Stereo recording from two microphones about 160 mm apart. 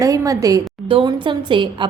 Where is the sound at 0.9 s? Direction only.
30° right (ahead or behind).